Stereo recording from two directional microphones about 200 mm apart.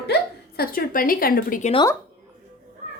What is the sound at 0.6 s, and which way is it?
A woman's voice, 45° left (ahead or behind).